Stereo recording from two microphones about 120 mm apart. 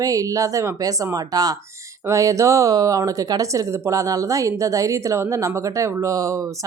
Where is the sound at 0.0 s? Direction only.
30° right (ahead or behind).